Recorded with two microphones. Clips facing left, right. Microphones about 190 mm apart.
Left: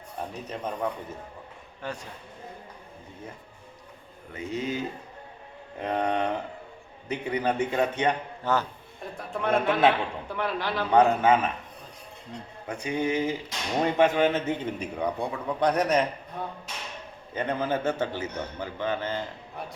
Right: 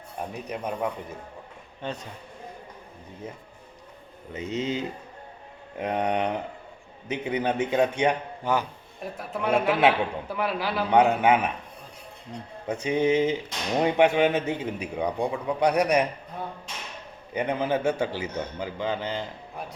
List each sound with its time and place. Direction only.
0.4 s a man's voice: 15° right (ahead or behind)
4.4 s a man's voice: 20° right (ahead or behind)
12.6 s a man's voice: 20° right (ahead or behind)
17.3 s a man's voice: 15° right (ahead or behind)